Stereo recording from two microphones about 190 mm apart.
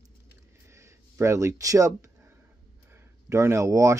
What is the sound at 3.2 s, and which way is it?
Speech, 15° right (ahead or behind).